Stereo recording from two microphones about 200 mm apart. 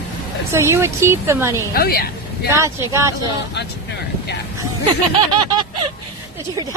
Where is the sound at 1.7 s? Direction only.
50° left (ahead or behind).